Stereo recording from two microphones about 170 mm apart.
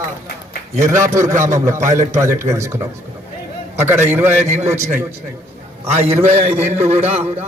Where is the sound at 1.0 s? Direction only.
15° right (ahead or behind).